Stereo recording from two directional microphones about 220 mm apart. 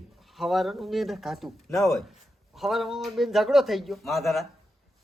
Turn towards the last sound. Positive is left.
turn(degrees=0)  # may be behind; listen again after turning